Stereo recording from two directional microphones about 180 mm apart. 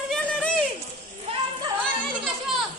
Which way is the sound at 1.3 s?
35° right (ahead or behind).